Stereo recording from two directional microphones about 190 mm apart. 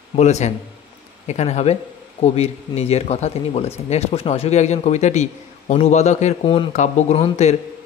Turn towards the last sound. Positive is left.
turn(degrees=35)  # may be behind; listen again after turning